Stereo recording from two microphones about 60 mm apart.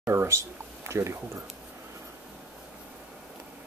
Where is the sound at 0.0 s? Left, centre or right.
Right.